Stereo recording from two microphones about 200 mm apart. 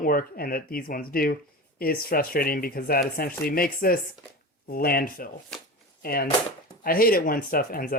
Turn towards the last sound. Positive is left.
turn(degrees=45)  # may be behind; listen again after turning